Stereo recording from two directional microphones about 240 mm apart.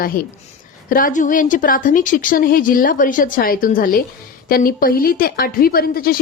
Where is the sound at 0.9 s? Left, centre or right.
Left.